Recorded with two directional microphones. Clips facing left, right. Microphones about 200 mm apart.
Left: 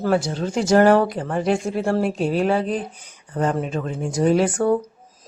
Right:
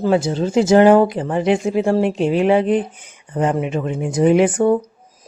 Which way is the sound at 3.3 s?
15° right (ahead or behind).